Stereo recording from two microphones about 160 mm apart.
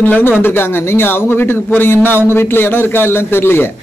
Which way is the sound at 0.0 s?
10° left (ahead or behind).